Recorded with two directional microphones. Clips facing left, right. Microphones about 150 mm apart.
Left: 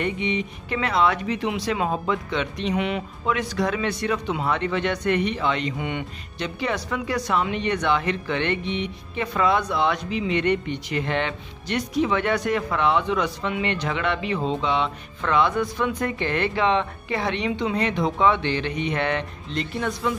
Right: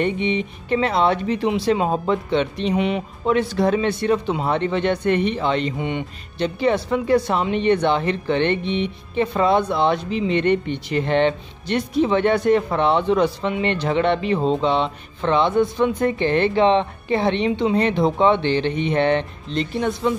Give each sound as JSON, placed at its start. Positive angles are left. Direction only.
{"t": 0.0, "sound": "speech", "side_deg": -30}